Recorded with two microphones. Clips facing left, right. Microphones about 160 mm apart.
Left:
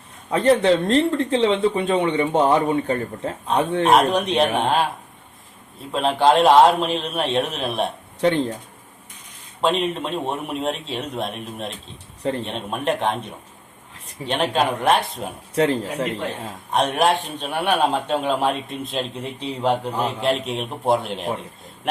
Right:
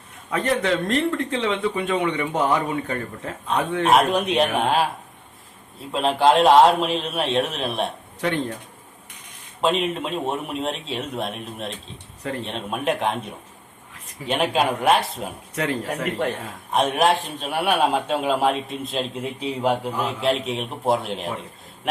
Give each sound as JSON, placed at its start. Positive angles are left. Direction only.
{"t": 0.3, "sound": "speech", "side_deg": 30}
{"t": 3.8, "sound": "a man's voice", "side_deg": -5}
{"t": 5.9, "sound": "a man's voice", "side_deg": 0}
{"t": 8.2, "sound": "speech", "side_deg": 30}
{"t": 9.6, "sound": "a man's voice", "side_deg": 0}
{"t": 14.3, "sound": "a man's voice", "side_deg": -5}
{"t": 15.5, "sound": "speech", "side_deg": 30}
{"t": 16.7, "sound": "a man's voice", "side_deg": 0}